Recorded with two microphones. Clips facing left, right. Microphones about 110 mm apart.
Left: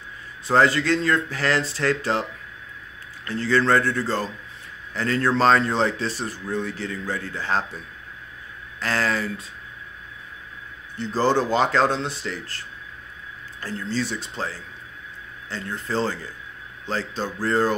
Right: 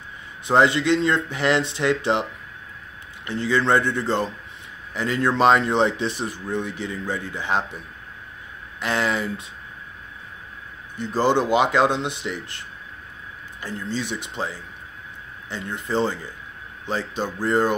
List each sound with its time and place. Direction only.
0.5 s speech: 20° right (ahead or behind)
3.3 s speech: 15° right (ahead or behind)
8.8 s speech: 20° right (ahead or behind)
11.0 s speech: 15° right (ahead or behind)